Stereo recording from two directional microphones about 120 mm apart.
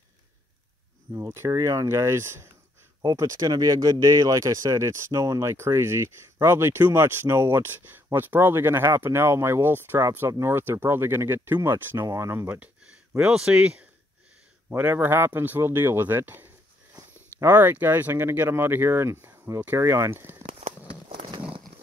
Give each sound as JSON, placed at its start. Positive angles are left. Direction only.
{"t": 1.1, "sound": "speech", "side_deg": -25}
{"t": 17.5, "sound": "speech", "side_deg": -15}
{"t": 21.1, "sound": "a sound", "side_deg": -50}